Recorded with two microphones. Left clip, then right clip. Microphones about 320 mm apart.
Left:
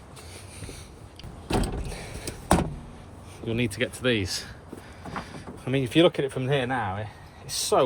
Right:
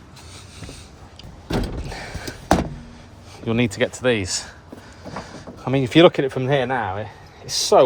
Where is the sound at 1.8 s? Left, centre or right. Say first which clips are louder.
Right 6 dB; right.